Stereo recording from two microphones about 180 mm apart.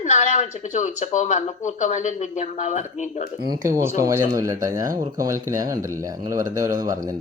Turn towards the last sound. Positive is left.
turn(degrees=-20)  # may be behind; listen again after turning